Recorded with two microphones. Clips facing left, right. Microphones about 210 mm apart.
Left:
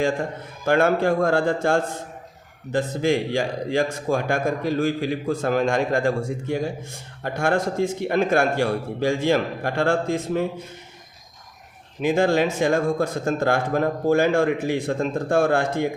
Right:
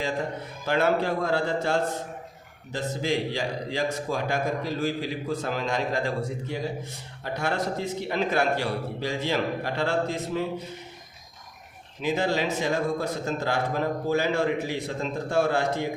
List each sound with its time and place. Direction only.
0.0 s a man's voice: 50° left (ahead or behind)
12.0 s a man's voice: 50° left (ahead or behind)